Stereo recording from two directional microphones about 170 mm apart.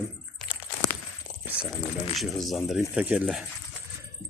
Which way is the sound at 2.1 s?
Centre (ahead or behind).